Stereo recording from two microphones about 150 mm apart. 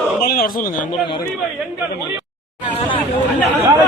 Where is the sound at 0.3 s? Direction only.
80° left.